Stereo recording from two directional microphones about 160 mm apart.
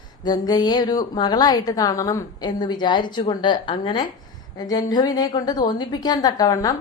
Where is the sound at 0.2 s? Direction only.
25° left (ahead or behind).